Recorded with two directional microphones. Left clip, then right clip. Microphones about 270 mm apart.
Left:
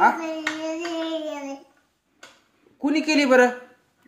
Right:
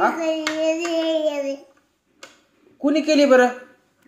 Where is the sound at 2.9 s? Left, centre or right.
Left.